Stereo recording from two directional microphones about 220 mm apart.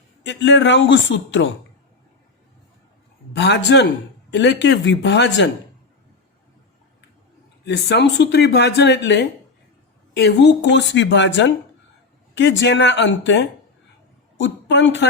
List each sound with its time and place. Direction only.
0.2 s a man's voice: 50° left (ahead or behind)
3.3 s speech: 50° left (ahead or behind)
7.6 s a man's voice: 50° left (ahead or behind)